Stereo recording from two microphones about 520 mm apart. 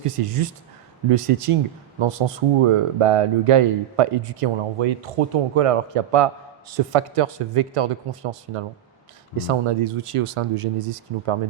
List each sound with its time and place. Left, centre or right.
0.0 s speech: right